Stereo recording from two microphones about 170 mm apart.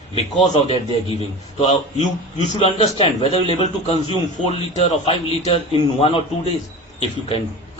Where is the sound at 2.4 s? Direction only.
35° left (ahead or behind).